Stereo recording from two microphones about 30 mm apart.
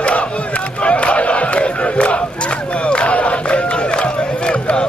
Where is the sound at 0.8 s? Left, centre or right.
Left.